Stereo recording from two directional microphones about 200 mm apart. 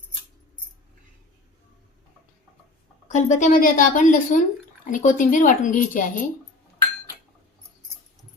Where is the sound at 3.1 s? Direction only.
35° left (ahead or behind).